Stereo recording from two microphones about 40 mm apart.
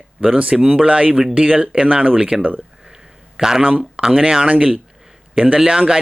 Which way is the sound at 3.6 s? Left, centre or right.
Right.